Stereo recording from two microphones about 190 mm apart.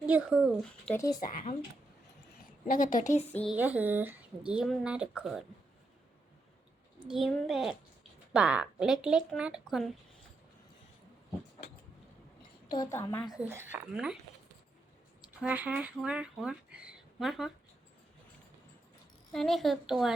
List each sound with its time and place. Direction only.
0.0 s speech: 5° right (ahead or behind)
0.9 s speech: 20° left (ahead or behind)
2.3 s a woman's voice: 45° left (ahead or behind)
3.5 s speech: 10° right (ahead or behind)
7.1 s speech: centre (ahead or behind)
12.7 s a woman's voice: 15° left (ahead or behind)
13.5 s speech: 15° right (ahead or behind)
15.4 s speech: 5° right (ahead or behind)
19.3 s speech: centre (ahead or behind)